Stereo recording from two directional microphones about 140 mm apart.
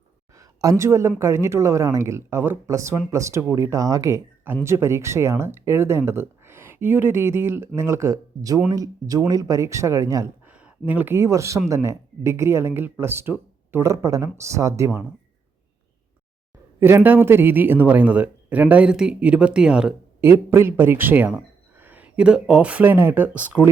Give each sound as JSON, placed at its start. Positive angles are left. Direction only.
{"t": 0.3, "sound": "a woman's voice", "side_deg": -25}
{"t": 10.4, "sound": "speech", "side_deg": -10}
{"t": 16.8, "sound": "speech", "side_deg": -15}
{"t": 20.2, "sound": "a man's voice", "side_deg": -20}